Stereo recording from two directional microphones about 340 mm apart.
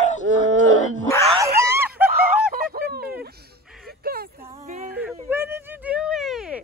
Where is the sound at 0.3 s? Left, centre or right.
Right.